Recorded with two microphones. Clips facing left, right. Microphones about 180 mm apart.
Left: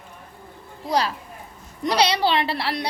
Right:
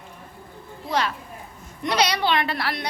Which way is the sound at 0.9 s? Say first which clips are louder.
Left 2 dB; 35° left (ahead or behind).